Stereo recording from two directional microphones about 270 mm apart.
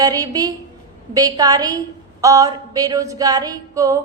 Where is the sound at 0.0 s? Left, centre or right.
Centre.